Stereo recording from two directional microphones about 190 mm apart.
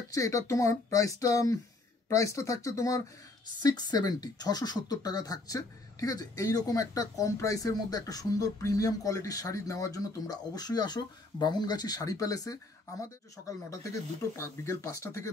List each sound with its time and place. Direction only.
0.1 s speech: 15° left (ahead or behind)
14.3 s speech: 15° left (ahead or behind)